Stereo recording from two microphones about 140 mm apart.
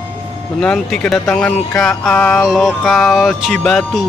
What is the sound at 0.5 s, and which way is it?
Speech, 5° left (ahead or behind).